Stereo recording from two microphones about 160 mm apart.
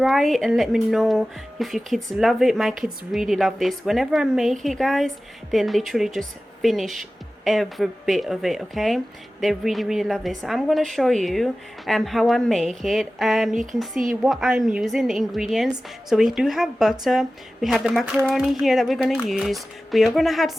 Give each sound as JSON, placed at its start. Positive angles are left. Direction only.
{"t": 0.0, "sound": "a woman's voice", "side_deg": 0}